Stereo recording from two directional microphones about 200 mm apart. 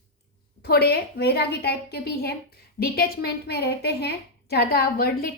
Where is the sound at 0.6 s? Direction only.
55° left (ahead or behind).